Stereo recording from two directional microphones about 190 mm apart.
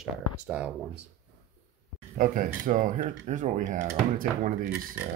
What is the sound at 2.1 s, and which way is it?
Speech, 45° right (ahead or behind).